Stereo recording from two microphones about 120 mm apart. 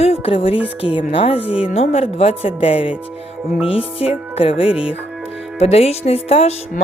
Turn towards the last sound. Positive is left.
turn(degrees=55)  # may be behind; listen again after turning